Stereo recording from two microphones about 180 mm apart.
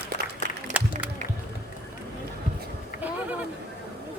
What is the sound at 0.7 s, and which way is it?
Music, 40° right (ahead or behind).